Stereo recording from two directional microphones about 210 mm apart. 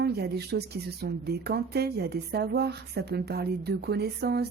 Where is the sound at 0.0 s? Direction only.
50° right (ahead or behind).